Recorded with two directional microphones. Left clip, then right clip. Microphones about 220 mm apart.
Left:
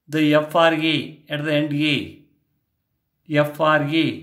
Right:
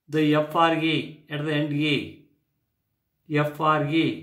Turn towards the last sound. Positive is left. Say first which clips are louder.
# left 4 dB
turn(degrees=40)  # may be behind; listen again after turning